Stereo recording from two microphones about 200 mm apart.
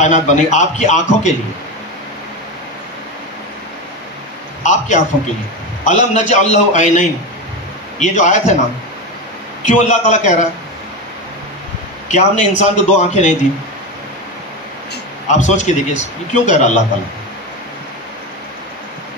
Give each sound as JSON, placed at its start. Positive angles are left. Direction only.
{"t": 0.0, "sound": "a man's voice", "side_deg": 35}
{"t": 4.6, "sound": "a man's voice", "side_deg": 35}
{"t": 9.7, "sound": "a man's voice", "side_deg": 35}
{"t": 12.1, "sound": "a man's voice", "side_deg": 35}
{"t": 15.2, "sound": "a man's voice", "side_deg": 35}